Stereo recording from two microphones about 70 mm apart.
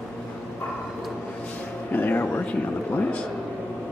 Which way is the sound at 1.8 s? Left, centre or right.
Left.